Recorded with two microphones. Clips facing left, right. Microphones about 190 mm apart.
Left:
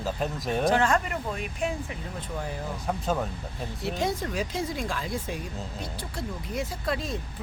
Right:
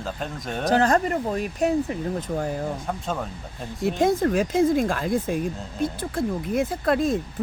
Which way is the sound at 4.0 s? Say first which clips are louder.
Right 9 dB; 50° right (ahead or behind).